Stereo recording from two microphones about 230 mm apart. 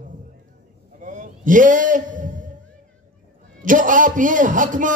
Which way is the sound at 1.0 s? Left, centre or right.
Right.